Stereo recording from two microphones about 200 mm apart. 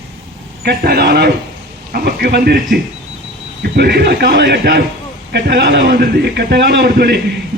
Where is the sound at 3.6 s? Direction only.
55° right (ahead or behind).